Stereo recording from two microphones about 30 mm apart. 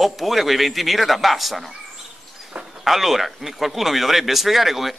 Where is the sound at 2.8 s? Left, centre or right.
Centre.